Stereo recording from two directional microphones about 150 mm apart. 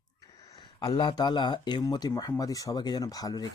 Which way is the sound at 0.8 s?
30° left (ahead or behind).